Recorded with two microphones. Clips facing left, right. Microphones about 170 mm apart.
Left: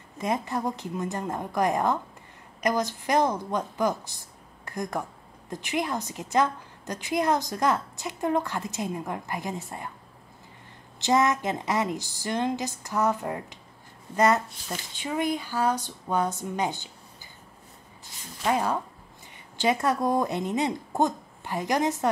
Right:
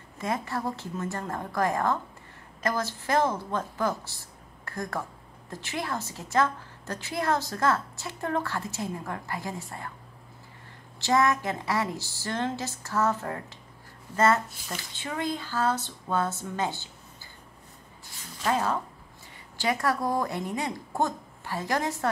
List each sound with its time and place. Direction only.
0.2 s a woman's voice: 20° left (ahead or behind)
11.0 s a woman's voice: 20° left (ahead or behind)
18.4 s a woman's voice: 15° left (ahead or behind)